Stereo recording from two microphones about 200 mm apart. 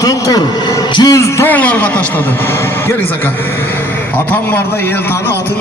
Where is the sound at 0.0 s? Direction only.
15° left (ahead or behind).